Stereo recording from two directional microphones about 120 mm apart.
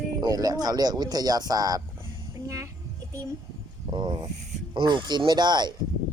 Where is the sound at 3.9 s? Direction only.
35° right (ahead or behind).